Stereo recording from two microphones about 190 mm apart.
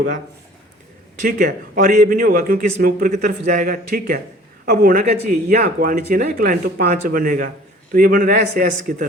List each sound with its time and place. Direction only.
1.2 s speech: 45° right (ahead or behind)